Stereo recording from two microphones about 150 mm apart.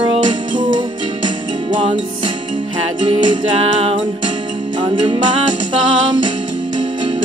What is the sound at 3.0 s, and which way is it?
Music, 30° right (ahead or behind).